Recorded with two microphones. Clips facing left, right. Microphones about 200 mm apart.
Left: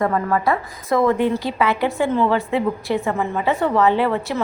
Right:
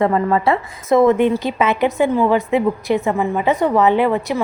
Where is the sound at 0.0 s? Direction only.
25° right (ahead or behind).